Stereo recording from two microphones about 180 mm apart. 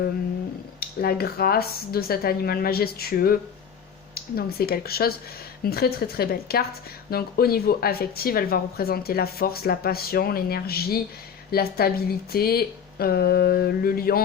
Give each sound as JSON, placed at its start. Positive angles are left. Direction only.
{"t": 0.8, "sound": "speech", "side_deg": 60}